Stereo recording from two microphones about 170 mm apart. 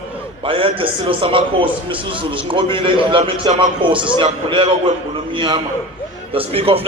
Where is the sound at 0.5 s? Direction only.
30° right (ahead or behind).